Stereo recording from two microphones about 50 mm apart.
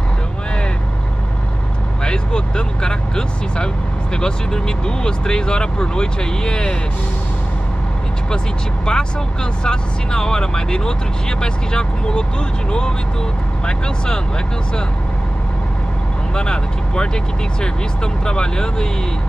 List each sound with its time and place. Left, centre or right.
2.0 s vehicle: centre
4.2 s speech: centre
8.8 s speech: centre
13.7 s speech: centre
16.3 s speech: centre